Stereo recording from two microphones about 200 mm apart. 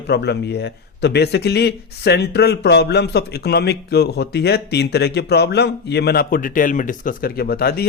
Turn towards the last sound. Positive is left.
turn(degrees=50)  # may be behind; listen again after turning